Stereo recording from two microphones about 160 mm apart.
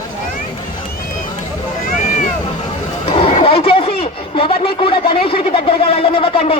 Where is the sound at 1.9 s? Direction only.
55° left (ahead or behind).